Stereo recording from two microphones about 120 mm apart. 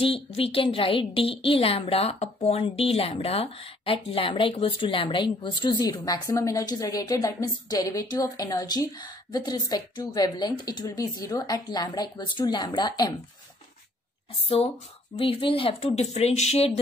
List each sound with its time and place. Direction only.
0.0 s a woman's voice: 50° left (ahead or behind); by 13.1 s 35° left (ahead or behind)
15.1 s a woman's voice: 50° left (ahead or behind)